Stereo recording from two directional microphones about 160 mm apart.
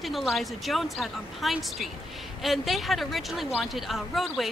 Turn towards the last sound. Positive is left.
turn(degrees=0)  # may be behind; listen again after turning